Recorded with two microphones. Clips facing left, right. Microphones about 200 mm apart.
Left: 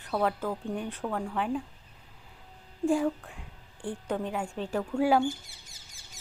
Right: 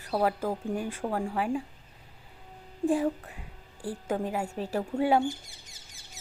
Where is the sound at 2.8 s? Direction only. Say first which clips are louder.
Even; centre (ahead or behind).